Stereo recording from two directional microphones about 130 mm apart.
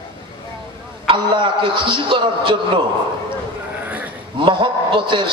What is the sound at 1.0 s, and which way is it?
A man's voice, 40° right (ahead or behind).